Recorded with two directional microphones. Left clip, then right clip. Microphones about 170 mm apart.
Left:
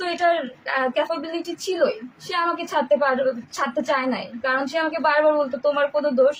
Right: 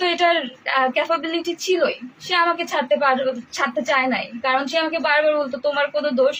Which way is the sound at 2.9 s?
15° left (ahead or behind).